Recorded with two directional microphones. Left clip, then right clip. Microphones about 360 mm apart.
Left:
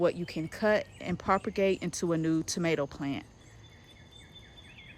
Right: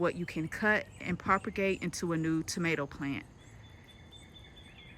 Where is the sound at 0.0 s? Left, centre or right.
Centre.